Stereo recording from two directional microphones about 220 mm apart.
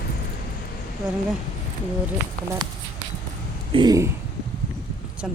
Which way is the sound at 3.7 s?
15° right (ahead or behind).